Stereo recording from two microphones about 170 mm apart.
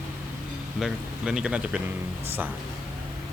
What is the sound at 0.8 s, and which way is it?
Speech, 5° right (ahead or behind).